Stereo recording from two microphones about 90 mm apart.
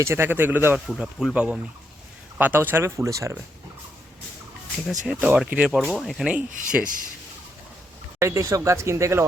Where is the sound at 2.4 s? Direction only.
20° right (ahead or behind).